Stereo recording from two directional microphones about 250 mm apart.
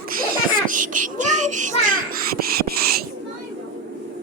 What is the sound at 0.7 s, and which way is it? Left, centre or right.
Child singing, right.